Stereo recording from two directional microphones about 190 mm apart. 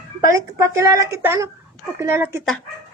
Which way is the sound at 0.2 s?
15° right (ahead or behind).